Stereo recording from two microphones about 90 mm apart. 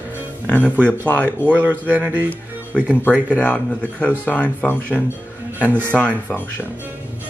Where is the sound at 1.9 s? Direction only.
20° right (ahead or behind).